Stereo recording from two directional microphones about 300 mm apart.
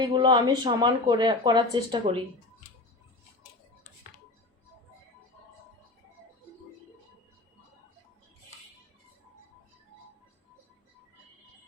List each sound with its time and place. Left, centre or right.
0.0 s speech: centre